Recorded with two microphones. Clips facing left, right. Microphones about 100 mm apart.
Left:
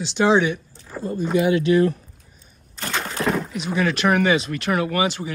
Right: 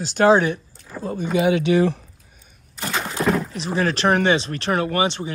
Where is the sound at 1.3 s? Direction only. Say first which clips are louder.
Even; 75° right (ahead or behind).